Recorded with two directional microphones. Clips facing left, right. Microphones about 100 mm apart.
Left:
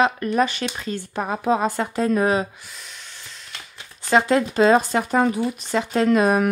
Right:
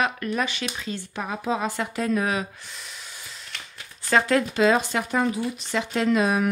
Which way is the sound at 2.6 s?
Centre (ahead or behind).